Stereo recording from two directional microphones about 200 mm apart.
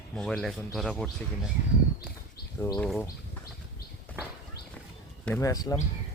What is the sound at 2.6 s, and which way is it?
Speech, 10° left (ahead or behind).